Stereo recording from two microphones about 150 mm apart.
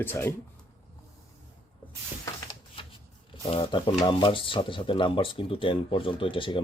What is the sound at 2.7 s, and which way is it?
Shuffling cards, 35° left (ahead or behind).